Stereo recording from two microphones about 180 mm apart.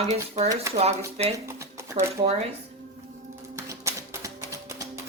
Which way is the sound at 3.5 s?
15° right (ahead or behind).